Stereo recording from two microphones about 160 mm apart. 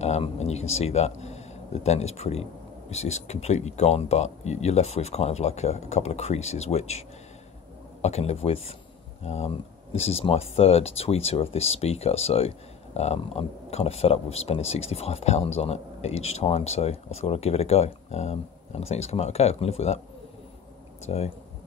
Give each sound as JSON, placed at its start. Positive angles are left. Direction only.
{"t": 0.0, "sound": "speech", "side_deg": 45}
{"t": 21.0, "sound": "speech", "side_deg": 40}